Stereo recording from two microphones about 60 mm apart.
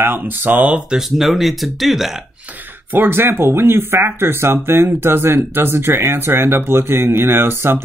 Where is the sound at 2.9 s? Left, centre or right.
Right.